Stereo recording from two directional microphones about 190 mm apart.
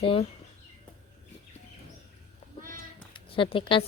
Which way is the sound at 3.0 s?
25° left (ahead or behind).